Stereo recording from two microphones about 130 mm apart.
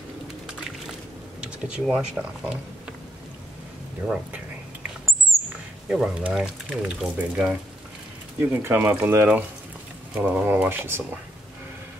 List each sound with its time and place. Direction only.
1.4 s speech: 5° right (ahead or behind)
5.9 s speech: 5° right (ahead or behind)